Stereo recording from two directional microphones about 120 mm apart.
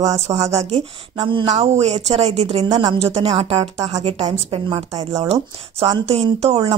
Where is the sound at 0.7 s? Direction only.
50° right (ahead or behind).